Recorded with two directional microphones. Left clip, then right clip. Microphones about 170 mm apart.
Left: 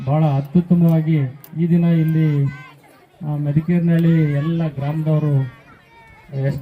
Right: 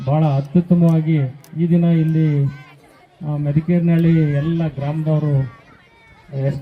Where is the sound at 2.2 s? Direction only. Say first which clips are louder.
Right 1 dB; 10° left (ahead or behind).